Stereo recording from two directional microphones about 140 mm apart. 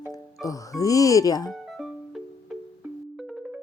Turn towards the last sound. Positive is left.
turn(degrees=0)  # may be behind; listen again after turning